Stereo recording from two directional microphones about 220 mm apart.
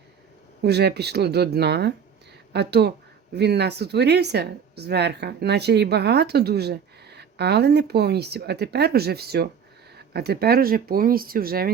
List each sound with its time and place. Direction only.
0.6 s speech: 50° right (ahead or behind)